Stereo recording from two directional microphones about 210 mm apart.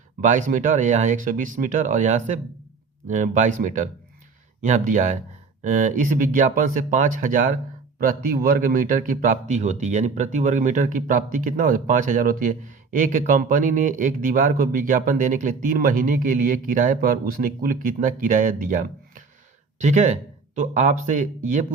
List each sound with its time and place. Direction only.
0.2 s a man's voice: 40° right (ahead or behind)
20.6 s a man's voice: 35° right (ahead or behind)